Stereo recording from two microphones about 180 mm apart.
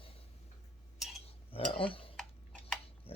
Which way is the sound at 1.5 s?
30° left (ahead or behind).